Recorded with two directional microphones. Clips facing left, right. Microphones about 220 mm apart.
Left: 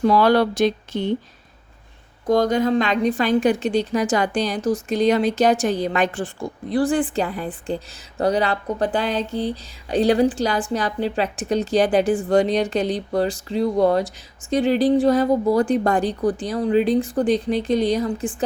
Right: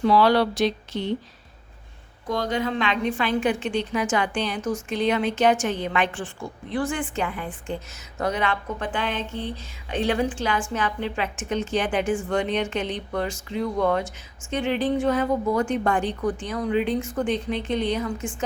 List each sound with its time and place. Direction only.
0.0 s speech: 45° left (ahead or behind)
2.2 s speech: 45° left (ahead or behind)